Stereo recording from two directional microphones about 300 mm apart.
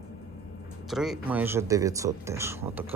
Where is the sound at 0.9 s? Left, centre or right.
Centre.